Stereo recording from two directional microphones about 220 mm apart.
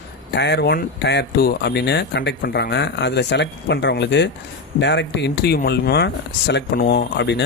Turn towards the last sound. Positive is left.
turn(degrees=50)  # may be behind; listen again after turning